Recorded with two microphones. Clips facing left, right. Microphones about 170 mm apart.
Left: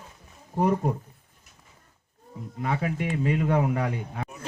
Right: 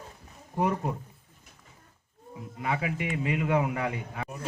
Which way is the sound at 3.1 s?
40° left (ahead or behind).